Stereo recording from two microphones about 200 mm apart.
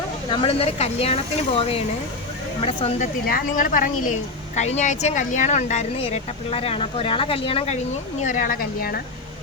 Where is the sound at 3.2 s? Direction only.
45° left (ahead or behind); by 7.8 s 30° left (ahead or behind).